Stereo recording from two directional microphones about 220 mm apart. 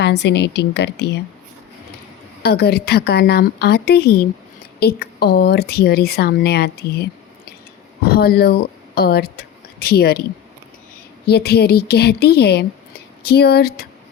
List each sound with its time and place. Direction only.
0.0 s a woman's voice: 50° left (ahead or behind)
2.4 s a woman's voice: 45° left (ahead or behind)
8.0 s speech: 45° left (ahead or behind)
11.3 s a woman's voice: 45° left (ahead or behind)